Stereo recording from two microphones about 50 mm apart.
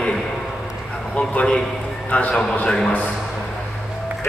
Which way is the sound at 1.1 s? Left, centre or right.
Left.